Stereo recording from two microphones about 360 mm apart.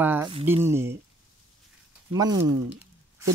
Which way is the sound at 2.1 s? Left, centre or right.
Centre.